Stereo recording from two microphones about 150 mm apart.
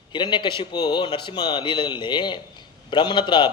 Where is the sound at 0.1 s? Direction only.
30° left (ahead or behind).